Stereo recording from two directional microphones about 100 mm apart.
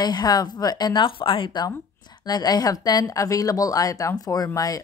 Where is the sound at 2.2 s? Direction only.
40° left (ahead or behind).